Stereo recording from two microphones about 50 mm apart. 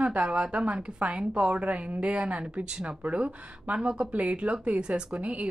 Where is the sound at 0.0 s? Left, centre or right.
Right.